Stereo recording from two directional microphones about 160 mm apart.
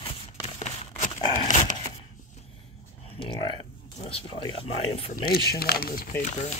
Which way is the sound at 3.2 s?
30° left (ahead or behind).